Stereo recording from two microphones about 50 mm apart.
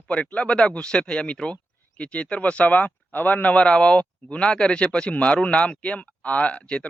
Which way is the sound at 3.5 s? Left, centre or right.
Left.